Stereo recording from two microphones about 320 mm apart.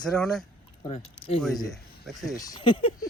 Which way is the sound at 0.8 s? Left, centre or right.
Centre.